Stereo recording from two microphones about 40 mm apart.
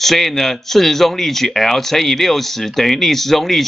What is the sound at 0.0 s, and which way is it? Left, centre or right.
Speech, centre.